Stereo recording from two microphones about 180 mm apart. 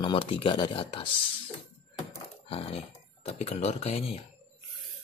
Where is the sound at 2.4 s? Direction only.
30° left (ahead or behind).